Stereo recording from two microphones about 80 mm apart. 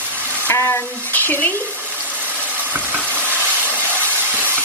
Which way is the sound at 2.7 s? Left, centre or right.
Right.